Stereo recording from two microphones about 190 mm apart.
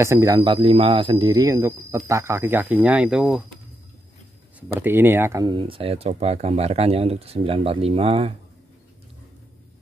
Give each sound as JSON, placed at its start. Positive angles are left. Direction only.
{"t": 0.0, "sound": "speech", "side_deg": -15}
{"t": 4.6, "sound": "speech", "side_deg": -10}
{"t": 5.6, "sound": "speech", "side_deg": -30}